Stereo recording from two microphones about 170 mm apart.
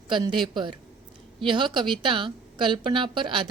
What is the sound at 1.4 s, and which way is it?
A woman's voice, 30° right (ahead or behind).